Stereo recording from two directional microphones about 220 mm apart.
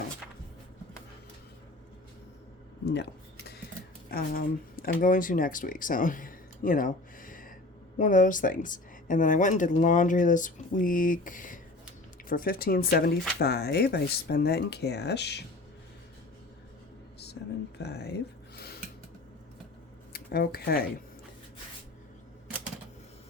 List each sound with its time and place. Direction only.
2.8 s speech: 50° left (ahead or behind)
4.1 s speech: 40° left (ahead or behind)
17.8 s a sound: 50° left (ahead or behind)
20.1 s speech: 45° left (ahead or behind)